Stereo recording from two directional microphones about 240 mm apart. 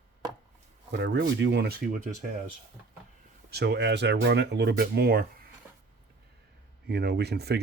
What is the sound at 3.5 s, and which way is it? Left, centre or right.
Speech, right.